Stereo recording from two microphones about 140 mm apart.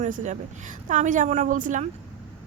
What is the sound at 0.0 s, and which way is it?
A woman's voice, 60° right (ahead or behind).